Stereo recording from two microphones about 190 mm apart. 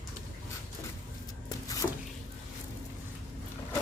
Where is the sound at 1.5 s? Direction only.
20° left (ahead or behind).